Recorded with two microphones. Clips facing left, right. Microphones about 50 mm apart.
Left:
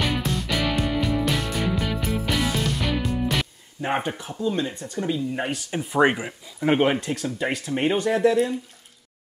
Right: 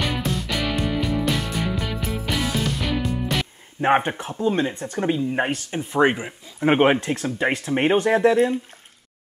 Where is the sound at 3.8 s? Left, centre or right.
Right.